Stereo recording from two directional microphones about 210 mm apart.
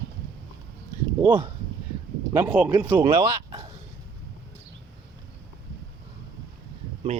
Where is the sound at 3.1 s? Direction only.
25° right (ahead or behind).